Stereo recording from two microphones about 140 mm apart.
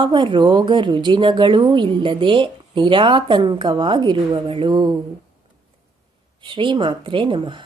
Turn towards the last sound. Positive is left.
turn(degrees=-35)  # may be behind; listen again after turning